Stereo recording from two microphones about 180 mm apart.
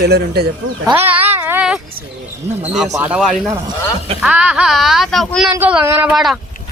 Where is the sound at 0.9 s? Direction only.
10° right (ahead or behind).